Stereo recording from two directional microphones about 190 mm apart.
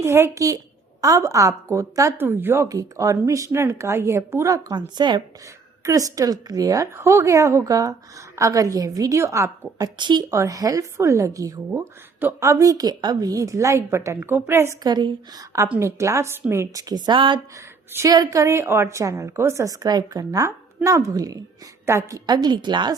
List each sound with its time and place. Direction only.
0.0 s a woman's voice: 15° right (ahead or behind)